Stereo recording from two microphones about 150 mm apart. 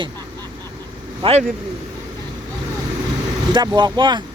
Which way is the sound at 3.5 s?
30° right (ahead or behind).